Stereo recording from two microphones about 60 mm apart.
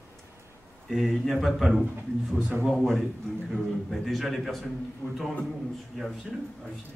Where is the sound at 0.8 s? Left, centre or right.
Centre.